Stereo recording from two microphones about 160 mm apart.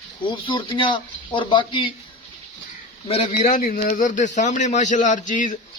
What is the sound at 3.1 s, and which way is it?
Speech, 40° left (ahead or behind).